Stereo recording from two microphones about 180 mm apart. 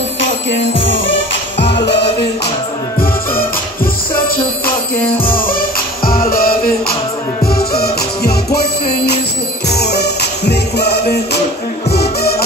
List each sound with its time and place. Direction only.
1.0 s music: 80° left
3.0 s music: 55° left (ahead or behind)
5.2 s music: 55° left (ahead or behind)